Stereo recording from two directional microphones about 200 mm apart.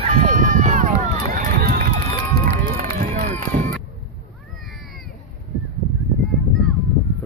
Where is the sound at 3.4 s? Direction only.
45° right (ahead or behind).